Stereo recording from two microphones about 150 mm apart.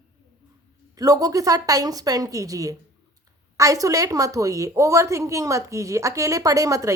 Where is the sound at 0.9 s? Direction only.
25° right (ahead or behind).